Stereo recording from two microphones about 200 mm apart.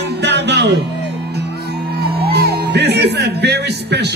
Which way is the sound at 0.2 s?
55° right (ahead or behind).